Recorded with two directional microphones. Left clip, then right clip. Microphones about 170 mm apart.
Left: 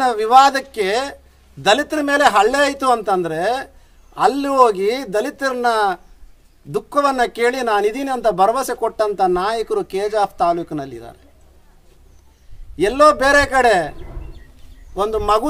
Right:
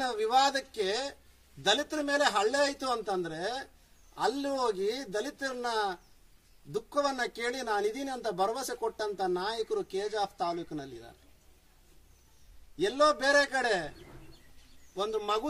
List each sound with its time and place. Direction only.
0.0 s speech: 30° left (ahead or behind)
7.1 s speech: 30° left (ahead or behind)
12.7 s speech: 30° left (ahead or behind)
15.0 s speech: 30° left (ahead or behind)